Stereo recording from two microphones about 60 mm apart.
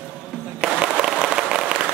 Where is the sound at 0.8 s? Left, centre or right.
Centre.